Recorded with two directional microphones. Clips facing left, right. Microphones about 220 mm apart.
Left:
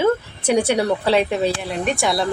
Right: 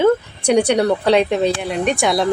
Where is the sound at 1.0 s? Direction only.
5° left (ahead or behind).